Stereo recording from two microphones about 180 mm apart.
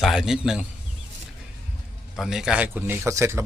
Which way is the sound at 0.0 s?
Centre (ahead or behind).